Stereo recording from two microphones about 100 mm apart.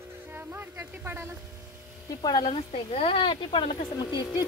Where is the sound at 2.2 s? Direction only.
50° left (ahead or behind).